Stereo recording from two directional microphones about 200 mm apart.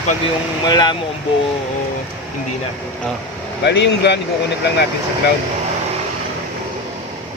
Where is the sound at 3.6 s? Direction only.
60° left (ahead or behind).